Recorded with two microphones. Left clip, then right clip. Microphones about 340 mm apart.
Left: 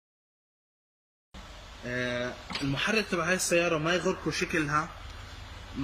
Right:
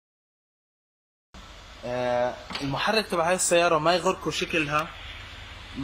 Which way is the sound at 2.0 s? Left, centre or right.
Right.